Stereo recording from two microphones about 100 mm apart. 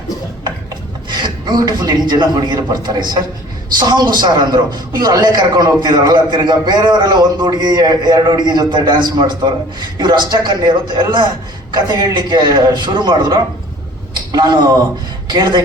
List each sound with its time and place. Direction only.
1.1 s a man's voice: 45° right (ahead or behind)